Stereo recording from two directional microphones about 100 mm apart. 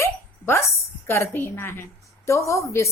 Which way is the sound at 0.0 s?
25° left (ahead or behind).